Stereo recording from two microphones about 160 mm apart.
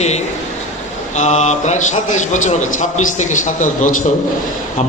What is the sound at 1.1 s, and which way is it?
A man's voice, 45° left (ahead or behind).